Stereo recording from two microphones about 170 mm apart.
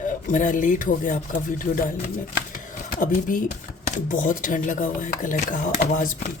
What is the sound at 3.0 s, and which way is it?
Speech, 50° left (ahead or behind).